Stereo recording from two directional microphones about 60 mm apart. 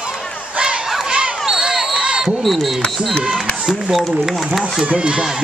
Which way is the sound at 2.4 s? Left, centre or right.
Centre.